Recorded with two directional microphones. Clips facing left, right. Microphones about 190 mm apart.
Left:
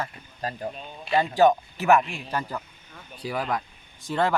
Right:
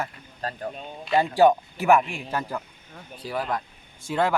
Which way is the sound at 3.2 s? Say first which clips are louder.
Even; 15° left (ahead or behind).